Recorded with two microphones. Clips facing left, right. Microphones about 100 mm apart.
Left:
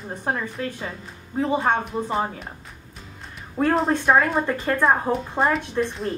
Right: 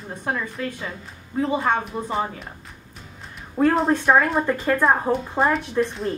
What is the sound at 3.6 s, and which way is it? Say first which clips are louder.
A woman's voice: right 2 dB; centre (ahead or behind).